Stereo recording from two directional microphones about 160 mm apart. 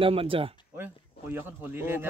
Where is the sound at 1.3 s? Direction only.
15° right (ahead or behind).